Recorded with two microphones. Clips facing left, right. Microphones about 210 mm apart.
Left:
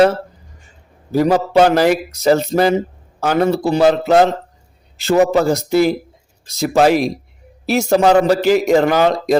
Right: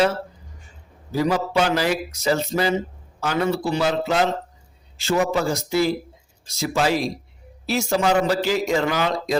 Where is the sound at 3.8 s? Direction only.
55° left (ahead or behind).